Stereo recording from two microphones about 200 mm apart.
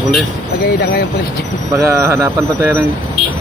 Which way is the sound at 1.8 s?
15° right (ahead or behind).